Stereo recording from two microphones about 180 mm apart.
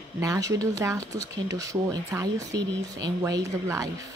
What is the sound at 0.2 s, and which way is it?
Speech, 20° right (ahead or behind).